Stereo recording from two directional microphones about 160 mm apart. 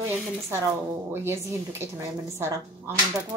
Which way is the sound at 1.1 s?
15° right (ahead or behind).